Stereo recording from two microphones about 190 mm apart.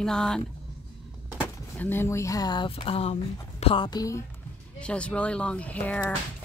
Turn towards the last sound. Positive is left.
turn(degrees=5)  # may be behind; listen again after turning